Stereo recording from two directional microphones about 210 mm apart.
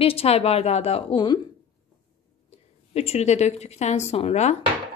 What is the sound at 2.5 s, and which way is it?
A woman's voice, 30° left (ahead or behind).